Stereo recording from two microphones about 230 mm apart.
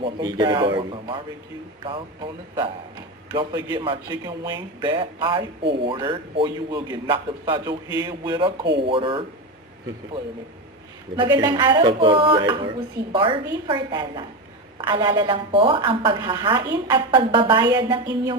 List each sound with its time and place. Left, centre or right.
0.0 s a man's voice: centre
11.2 s a man's voice: centre